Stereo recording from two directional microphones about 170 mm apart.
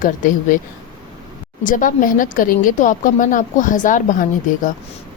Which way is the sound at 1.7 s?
50° left (ahead or behind).